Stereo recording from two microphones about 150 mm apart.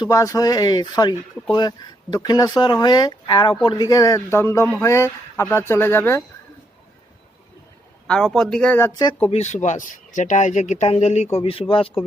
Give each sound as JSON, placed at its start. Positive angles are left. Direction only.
{"t": 0.0, "sound": "speech", "side_deg": 20}
{"t": 8.0, "sound": "speech", "side_deg": 5}
{"t": 9.3, "sound": "speech", "side_deg": 50}